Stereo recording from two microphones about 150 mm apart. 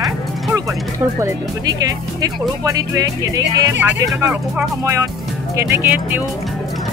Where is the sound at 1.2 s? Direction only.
25° right (ahead or behind).